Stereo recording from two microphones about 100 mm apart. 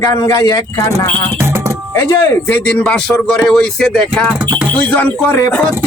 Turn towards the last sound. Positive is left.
turn(degrees=15)  # may be behind; listen again after turning